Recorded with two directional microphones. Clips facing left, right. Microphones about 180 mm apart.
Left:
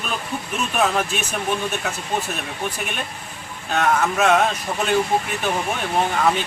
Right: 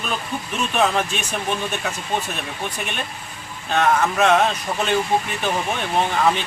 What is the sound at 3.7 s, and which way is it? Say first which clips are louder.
A man's voice: right 1 dB; 5° left (ahead or behind).